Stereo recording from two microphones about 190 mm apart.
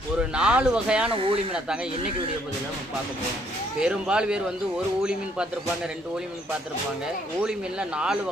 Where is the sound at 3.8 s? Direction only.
5° right (ahead or behind).